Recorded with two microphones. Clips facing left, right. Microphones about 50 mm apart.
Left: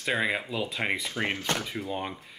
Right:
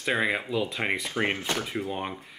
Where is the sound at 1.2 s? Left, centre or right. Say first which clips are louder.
Right 5 dB; centre.